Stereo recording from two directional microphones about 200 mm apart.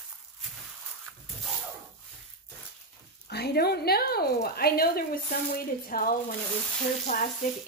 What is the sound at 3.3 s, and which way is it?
Speech, 55° left (ahead or behind).